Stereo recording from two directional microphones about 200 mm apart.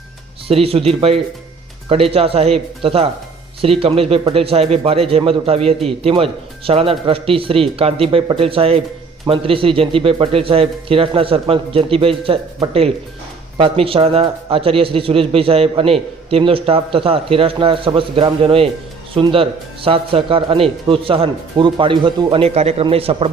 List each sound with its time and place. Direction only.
0.4 s a man's voice: 30° right (ahead or behind)